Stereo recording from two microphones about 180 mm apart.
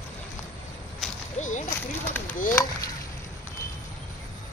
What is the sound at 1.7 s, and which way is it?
Speech, 10° left (ahead or behind).